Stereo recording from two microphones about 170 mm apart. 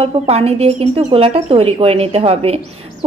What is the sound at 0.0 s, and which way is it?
Speech, 35° right (ahead or behind).